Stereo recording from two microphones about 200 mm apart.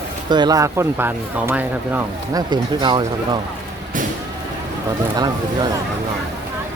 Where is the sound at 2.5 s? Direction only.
20° right (ahead or behind).